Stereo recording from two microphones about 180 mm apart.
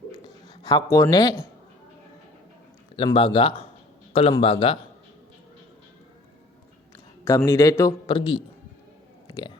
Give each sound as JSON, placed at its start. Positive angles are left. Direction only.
{"t": 0.4, "sound": "speech", "side_deg": 20}
{"t": 2.9, "sound": "a man's voice", "side_deg": 30}
{"t": 7.3, "sound": "a man's voice", "side_deg": 15}
{"t": 9.2, "sound": "a sound", "side_deg": 25}